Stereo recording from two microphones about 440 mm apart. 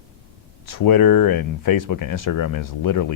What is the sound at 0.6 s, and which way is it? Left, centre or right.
Speech, left.